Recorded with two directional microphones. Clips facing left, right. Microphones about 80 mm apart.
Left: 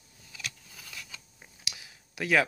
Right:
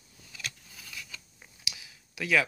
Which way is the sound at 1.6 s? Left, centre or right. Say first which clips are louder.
Right 1 dB; left.